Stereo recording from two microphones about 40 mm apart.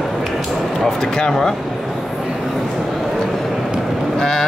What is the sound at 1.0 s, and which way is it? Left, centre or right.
Speech, centre.